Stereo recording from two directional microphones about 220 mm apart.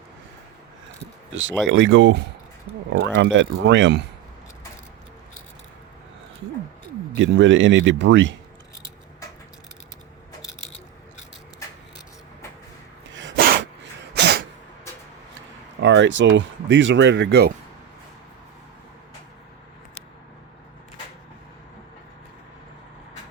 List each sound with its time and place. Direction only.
1.6 s speech: 60° right (ahead or behind)
7.2 s speech: 55° right (ahead or behind)
13.1 s sneeze: 55° right (ahead or behind)
14.2 s a sound: 50° right (ahead or behind)
15.4 s speech: 55° right (ahead or behind)